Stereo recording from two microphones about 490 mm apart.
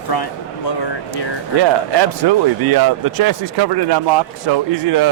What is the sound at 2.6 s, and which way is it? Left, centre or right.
Speech, right.